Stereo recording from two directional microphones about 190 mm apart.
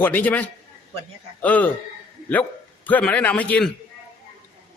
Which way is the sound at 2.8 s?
10° left (ahead or behind).